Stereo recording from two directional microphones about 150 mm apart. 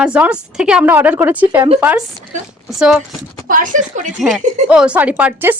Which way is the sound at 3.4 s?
60° right (ahead or behind).